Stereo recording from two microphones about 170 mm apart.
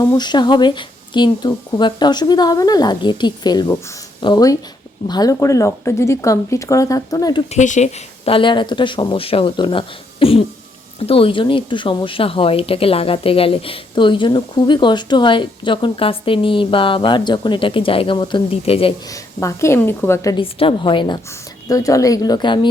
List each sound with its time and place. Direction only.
0.0 s speech: 20° left (ahead or behind)
7.5 s a woman's voice: 45° left (ahead or behind)
19.0 s a woman's voice: 20° left (ahead or behind)
20.3 s speech: 30° left (ahead or behind)